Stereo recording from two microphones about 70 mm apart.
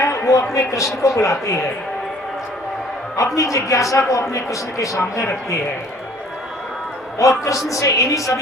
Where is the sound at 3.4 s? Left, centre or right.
Left.